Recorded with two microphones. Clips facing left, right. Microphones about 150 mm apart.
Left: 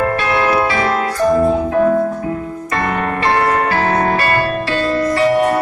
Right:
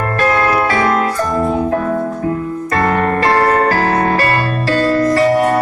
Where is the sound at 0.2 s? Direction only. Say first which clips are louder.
Right 1 dB; 45° right (ahead or behind).